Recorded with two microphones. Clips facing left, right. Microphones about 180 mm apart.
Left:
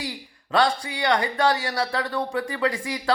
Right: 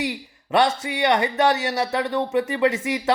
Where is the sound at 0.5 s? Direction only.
20° right (ahead or behind).